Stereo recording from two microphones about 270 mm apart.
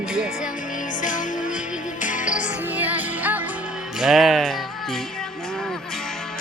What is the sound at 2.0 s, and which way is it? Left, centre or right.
Music, left.